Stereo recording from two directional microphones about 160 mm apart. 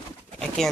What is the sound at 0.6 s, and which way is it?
Speech, centre (ahead or behind).